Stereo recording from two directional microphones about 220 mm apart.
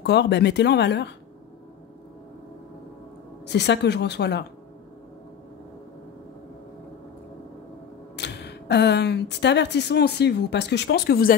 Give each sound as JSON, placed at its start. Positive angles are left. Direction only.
{"t": 0.0, "sound": "speech", "side_deg": 50}
{"t": 3.4, "sound": "speech", "side_deg": 50}
{"t": 8.2, "sound": "speech", "side_deg": 50}